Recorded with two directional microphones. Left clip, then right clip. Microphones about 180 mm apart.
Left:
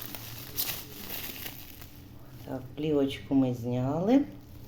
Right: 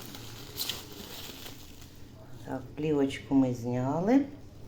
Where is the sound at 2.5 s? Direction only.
Centre (ahead or behind).